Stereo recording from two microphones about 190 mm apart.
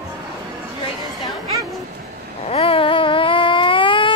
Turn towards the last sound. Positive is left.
turn(degrees=25)  # may be behind; listen again after turning